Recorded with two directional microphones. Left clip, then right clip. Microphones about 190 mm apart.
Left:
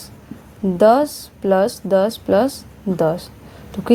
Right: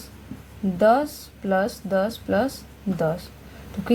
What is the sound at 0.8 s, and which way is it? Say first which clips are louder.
Speech: left 5 dB; 40° left (ahead or behind).